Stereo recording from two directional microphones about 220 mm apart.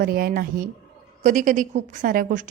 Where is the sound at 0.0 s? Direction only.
40° right (ahead or behind).